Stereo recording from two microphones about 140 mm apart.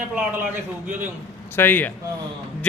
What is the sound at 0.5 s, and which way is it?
Speech, 15° right (ahead or behind).